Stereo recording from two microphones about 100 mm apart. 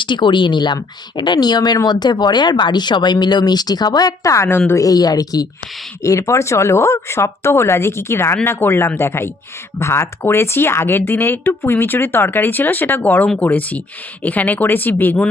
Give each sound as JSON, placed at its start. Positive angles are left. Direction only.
{"t": 0.0, "sound": "speech", "side_deg": 50}
{"t": 4.8, "sound": "speech", "side_deg": 40}